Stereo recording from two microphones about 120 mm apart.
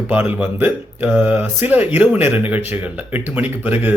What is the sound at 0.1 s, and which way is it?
Speech, 15° right (ahead or behind).